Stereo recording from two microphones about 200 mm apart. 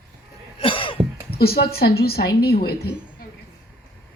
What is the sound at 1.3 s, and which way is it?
Speech, 50° left (ahead or behind).